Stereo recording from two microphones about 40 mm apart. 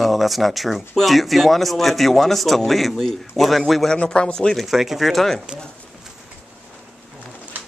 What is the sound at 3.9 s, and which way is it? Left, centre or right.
Speech, left.